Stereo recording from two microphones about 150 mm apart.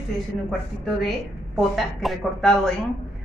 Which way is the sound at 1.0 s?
Centre (ahead or behind).